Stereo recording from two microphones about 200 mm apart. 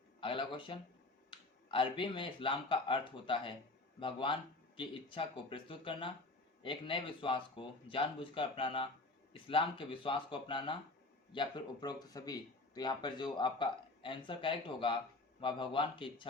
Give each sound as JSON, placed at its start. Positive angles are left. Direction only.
{"t": 0.2, "sound": "speech", "side_deg": 25}